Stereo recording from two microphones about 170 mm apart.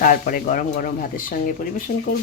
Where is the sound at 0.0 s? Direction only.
55° left (ahead or behind).